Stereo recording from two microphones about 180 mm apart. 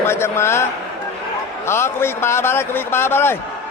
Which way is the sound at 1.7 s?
15° left (ahead or behind).